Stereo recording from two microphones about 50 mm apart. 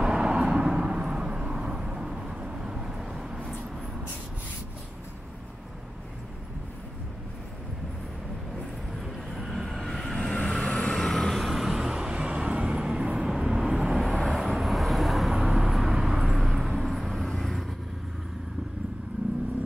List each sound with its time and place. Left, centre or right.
0.0 s vehicle: centre
9.0 s vehicle: centre
10.3 s vehicle: centre
11.0 s vehicle: centre
14.2 s vehicle: centre
17.1 s vehicle: centre